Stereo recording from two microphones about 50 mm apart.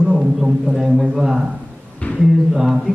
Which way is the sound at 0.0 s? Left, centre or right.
Centre.